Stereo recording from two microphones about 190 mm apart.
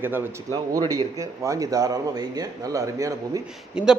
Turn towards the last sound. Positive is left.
turn(degrees=-5)  # may be behind; listen again after turning